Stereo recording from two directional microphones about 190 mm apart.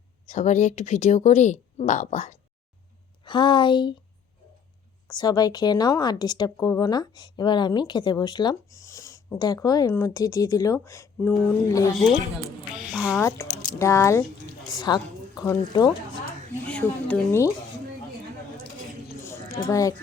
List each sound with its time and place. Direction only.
0.3 s speech: 40° left (ahead or behind)
3.2 s a woman's voice: 25° left (ahead or behind)
5.0 s a woman's voice: 20° left (ahead or behind)
12.7 s music: 5° right (ahead or behind)
13.1 s a woman's voice: 15° left (ahead or behind)
16.6 s speech: 5° left (ahead or behind)
19.2 s a sound: 15° left (ahead or behind)